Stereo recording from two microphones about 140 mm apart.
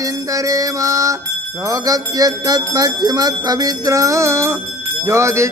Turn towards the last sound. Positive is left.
turn(degrees=-20)  # may be behind; listen again after turning